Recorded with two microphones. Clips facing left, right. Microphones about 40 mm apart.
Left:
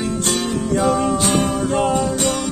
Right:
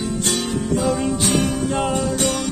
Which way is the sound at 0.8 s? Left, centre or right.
Left.